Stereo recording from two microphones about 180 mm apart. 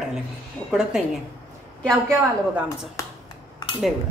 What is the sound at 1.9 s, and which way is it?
Speech, 15° right (ahead or behind).